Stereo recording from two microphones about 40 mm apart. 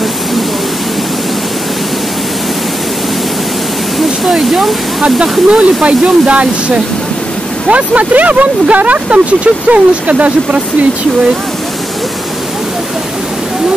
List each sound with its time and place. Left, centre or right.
4.2 s speech: centre
5.5 s speech: right